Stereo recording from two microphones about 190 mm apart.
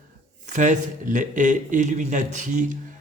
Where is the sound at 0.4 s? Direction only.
40° right (ahead or behind).